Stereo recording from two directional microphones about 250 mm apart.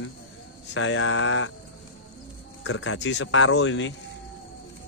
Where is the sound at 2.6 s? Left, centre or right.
Left.